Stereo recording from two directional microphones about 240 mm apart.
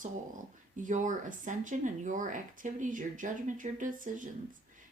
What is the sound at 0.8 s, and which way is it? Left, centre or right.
Speech, right.